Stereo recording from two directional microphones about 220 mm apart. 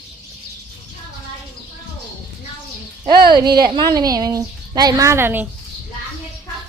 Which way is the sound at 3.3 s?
20° right (ahead or behind).